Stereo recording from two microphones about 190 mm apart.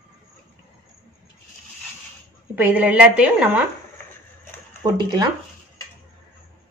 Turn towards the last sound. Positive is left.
turn(degrees=-20)  # may be behind; listen again after turning